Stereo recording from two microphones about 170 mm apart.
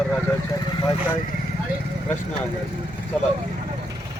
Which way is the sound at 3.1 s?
5° left (ahead or behind).